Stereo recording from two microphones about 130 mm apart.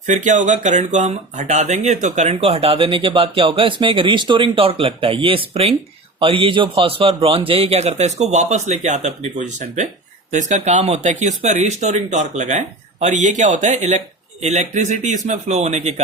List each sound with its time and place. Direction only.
0.1 s a man's voice: 70° right (ahead or behind)